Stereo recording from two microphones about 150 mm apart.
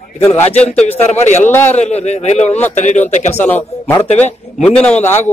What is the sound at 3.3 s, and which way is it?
Speech, 15° left (ahead or behind).